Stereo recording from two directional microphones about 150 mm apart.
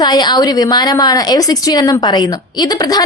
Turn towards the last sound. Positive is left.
turn(degrees=25)  # may be behind; listen again after turning